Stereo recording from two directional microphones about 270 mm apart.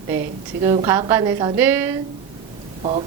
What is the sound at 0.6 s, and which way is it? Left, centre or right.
A woman's voice, centre.